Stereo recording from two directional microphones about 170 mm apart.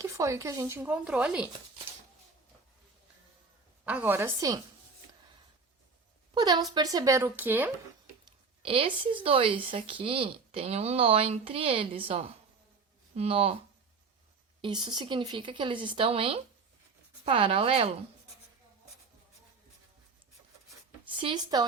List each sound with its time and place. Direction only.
0.0 s speech: 15° right (ahead or behind)
3.8 s speech: 10° right (ahead or behind)
6.3 s speech: 25° right (ahead or behind)
8.6 s speech: 35° right (ahead or behind)
14.6 s speech: 25° right (ahead or behind)
21.2 s speech: 30° right (ahead or behind)